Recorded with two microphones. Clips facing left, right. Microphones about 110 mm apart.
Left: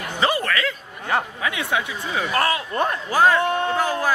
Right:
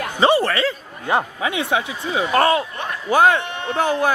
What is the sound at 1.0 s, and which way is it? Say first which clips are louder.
Speech: right 3 dB; 20° right (ahead or behind).